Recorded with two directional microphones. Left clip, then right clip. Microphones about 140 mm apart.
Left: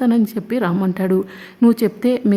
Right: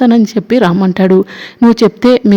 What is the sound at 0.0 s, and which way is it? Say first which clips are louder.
Speech: right 8 dB; 35° right (ahead or behind).